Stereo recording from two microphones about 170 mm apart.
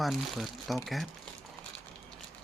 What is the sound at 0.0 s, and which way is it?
Speech, centre (ahead or behind).